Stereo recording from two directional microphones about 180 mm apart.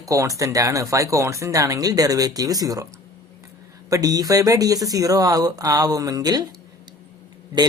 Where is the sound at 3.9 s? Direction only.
20° right (ahead or behind).